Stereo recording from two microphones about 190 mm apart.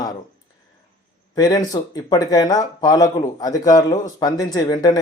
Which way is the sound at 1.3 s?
20° left (ahead or behind).